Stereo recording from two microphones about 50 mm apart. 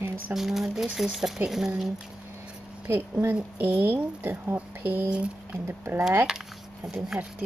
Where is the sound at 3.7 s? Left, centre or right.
Right.